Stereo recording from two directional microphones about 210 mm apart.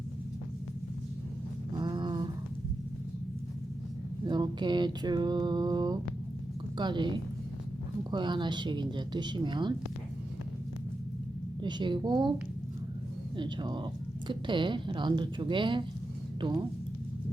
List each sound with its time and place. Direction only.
1.8 s a sound: 20° right (ahead or behind)
4.3 s speech: 20° right (ahead or behind)
11.6 s speech: 20° right (ahead or behind)
13.3 s speech: 20° right (ahead or behind)